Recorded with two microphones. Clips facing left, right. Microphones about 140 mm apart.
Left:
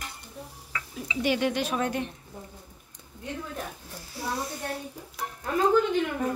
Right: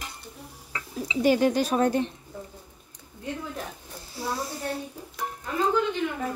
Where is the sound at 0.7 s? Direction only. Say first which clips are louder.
Right 4 dB; 35° right (ahead or behind).